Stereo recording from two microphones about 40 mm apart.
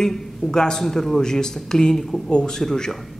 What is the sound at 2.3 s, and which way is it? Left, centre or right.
Speech, left.